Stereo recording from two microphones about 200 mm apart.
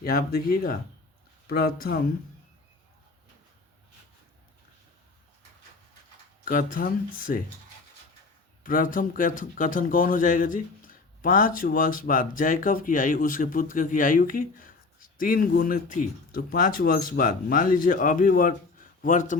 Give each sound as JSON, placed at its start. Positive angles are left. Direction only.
{"t": 0.0, "sound": "a man's voice", "side_deg": 50}
{"t": 6.4, "sound": "a man's voice", "side_deg": 45}
{"t": 8.6, "sound": "a man's voice", "side_deg": 45}